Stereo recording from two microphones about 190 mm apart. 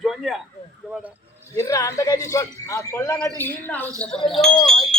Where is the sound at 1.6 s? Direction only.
15° left (ahead or behind).